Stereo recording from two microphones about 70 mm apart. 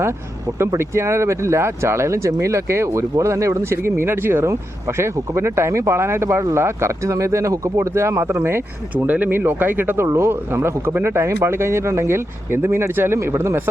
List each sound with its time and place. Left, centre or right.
0.6 s speech: right
9.0 s speech: right